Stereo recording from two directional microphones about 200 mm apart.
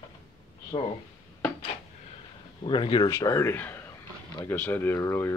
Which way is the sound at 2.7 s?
25° left (ahead or behind).